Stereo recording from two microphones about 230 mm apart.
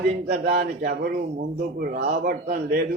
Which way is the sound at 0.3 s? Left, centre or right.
Right.